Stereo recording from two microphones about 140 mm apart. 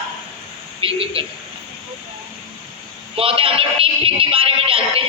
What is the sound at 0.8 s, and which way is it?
Speech, 40° right (ahead or behind).